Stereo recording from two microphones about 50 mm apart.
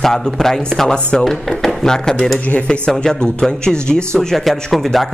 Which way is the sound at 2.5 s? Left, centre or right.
Centre.